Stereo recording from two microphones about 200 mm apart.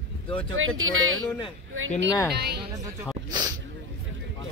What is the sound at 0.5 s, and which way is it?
Speech, 90° right.